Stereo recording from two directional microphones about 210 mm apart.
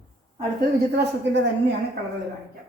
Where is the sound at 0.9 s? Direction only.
55° right (ahead or behind).